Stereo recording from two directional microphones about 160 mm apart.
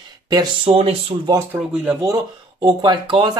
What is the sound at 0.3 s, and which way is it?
Speech, 25° right (ahead or behind).